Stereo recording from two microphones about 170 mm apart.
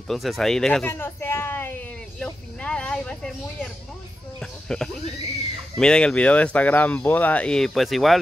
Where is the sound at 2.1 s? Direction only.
5° left (ahead or behind).